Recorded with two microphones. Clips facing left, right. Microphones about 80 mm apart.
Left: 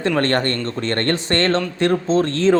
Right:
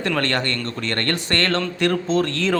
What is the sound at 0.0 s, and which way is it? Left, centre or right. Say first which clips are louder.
Speech: left 4 dB; left.